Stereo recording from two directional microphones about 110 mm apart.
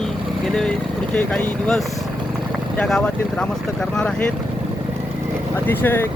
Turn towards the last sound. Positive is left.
turn(degrees=20)  # may be behind; listen again after turning